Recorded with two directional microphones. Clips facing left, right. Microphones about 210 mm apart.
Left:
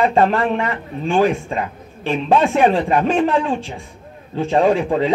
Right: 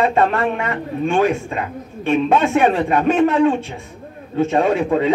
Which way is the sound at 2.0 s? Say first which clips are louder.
Right 1 dB; 30° left (ahead or behind).